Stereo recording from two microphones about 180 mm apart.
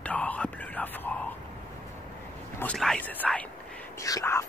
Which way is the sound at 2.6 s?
5° left (ahead or behind).